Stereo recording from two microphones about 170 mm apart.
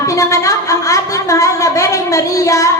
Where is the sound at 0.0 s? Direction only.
20° left (ahead or behind).